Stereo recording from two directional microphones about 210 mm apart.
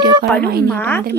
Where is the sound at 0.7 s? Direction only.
10° left (ahead or behind).